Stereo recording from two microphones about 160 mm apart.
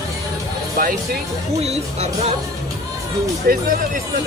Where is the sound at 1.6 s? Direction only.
40° right (ahead or behind).